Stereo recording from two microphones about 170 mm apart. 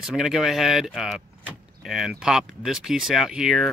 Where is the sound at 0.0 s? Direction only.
Centre (ahead or behind).